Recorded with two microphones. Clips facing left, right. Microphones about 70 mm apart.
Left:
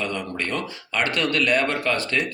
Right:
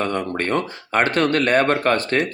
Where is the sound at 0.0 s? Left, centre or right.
Right.